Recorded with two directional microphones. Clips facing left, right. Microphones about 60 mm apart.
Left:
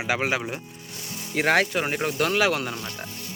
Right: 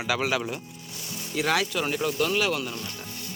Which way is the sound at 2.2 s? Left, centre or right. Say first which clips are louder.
Left 5 dB; left.